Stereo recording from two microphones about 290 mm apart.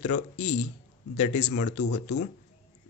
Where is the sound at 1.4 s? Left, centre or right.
Left.